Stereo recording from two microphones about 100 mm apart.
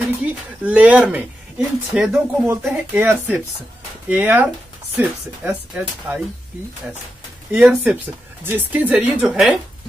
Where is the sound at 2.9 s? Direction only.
15° right (ahead or behind).